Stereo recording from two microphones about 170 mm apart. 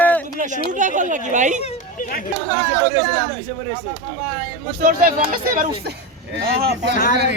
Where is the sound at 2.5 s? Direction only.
25° left (ahead or behind).